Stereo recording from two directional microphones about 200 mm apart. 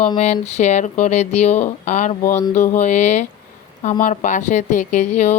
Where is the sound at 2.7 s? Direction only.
35° left (ahead or behind).